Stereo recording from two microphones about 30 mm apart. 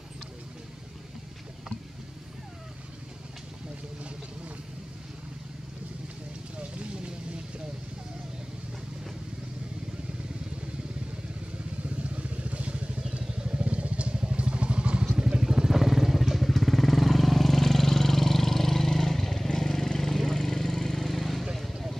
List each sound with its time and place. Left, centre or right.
6.6 s vehicle: right
12.0 s vehicle: right
14.1 s vehicle: right
15.1 s motorcycle: right; by 21.1 s centre
21.1 s vehicle: centre